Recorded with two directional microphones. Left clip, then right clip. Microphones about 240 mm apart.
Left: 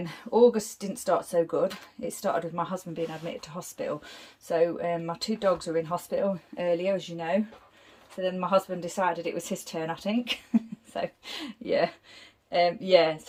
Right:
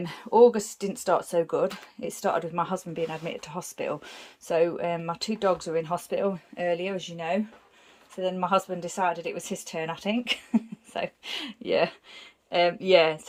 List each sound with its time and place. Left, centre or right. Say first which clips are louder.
0.0 s speech: right 3 dB; centre
11.6 s speech: right 1 dB; centre